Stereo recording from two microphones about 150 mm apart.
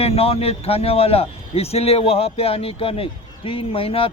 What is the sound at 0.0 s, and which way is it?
Speech, 40° left (ahead or behind).